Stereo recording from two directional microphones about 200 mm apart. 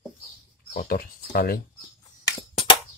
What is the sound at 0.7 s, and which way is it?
Speech, 45° left (ahead or behind).